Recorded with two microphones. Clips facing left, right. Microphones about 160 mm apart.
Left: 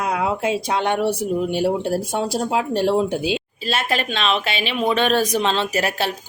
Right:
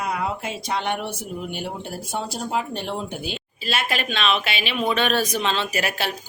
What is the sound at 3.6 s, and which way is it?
Speech, 30° left (ahead or behind).